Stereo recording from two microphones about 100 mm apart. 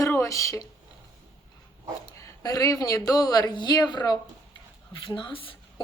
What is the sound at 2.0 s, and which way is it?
Speech, 35° left (ahead or behind).